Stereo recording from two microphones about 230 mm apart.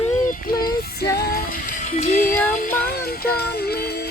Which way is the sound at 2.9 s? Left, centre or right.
Left.